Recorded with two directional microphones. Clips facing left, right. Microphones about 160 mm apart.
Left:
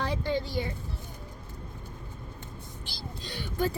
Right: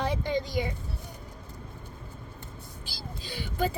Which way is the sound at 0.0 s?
20° right (ahead or behind).